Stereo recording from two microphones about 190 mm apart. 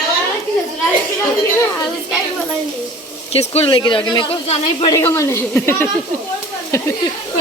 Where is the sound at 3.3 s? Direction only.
30° left (ahead or behind).